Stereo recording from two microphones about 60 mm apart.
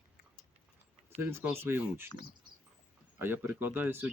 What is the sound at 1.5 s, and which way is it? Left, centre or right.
Speech, right.